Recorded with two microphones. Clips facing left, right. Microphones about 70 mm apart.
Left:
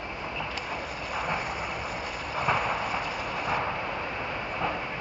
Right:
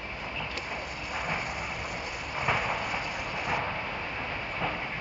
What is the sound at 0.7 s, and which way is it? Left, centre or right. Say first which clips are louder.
Vehicle: left 2 dB; centre.